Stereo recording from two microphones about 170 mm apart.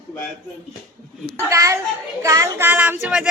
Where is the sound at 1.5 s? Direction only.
20° right (ahead or behind).